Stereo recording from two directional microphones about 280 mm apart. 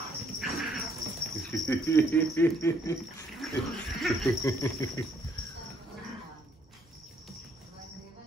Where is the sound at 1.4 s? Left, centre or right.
Centre.